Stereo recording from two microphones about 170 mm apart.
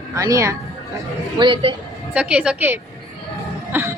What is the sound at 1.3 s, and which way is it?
Speech, 30° right (ahead or behind).